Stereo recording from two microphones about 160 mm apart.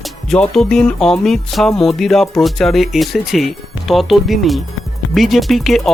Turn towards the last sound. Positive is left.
turn(degrees=0)  # may be behind; listen again after turning